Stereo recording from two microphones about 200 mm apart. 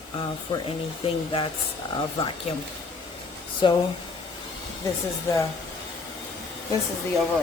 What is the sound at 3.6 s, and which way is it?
Speech, 25° left (ahead or behind).